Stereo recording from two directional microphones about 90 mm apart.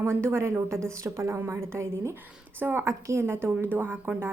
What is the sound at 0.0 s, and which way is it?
A woman's voice, 25° right (ahead or behind).